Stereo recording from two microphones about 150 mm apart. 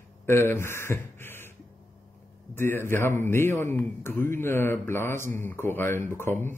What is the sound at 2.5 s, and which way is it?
A man's voice, 15° left (ahead or behind).